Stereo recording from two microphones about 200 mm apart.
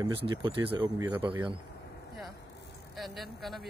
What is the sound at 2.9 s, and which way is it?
Speech, centre (ahead or behind).